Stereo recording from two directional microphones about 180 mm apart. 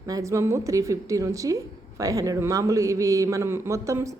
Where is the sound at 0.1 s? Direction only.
15° right (ahead or behind).